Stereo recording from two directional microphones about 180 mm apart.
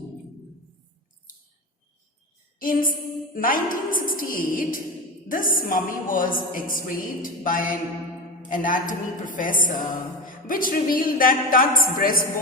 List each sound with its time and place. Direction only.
2.6 s a woman's voice: 50° left (ahead or behind)